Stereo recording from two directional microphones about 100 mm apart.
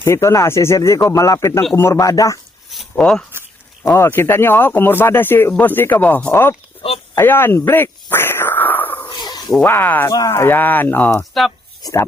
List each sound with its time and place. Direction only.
0.0 s speech: 30° left (ahead or behind)
2.6 s speech: centre (ahead or behind)
3.9 s speech: 25° left (ahead or behind)
7.2 s a sound: 20° left (ahead or behind)
9.0 s a sound: 45° left (ahead or behind)
9.6 s speech: 20° left (ahead or behind)
10.1 s speech: 40° left (ahead or behind)
10.3 s speech: 20° left (ahead or behind)
11.2 s speech: centre (ahead or behind)
11.8 s speech: 35° left (ahead or behind)